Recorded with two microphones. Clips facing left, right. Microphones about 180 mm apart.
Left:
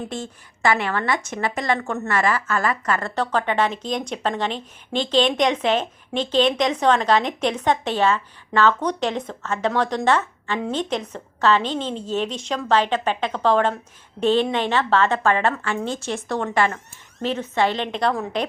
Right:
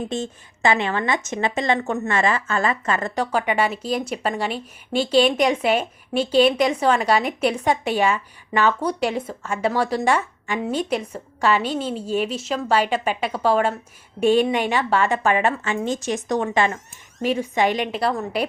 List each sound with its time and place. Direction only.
0.1 s a woman's voice: 20° right (ahead or behind)
3.2 s speech: 10° right (ahead or behind)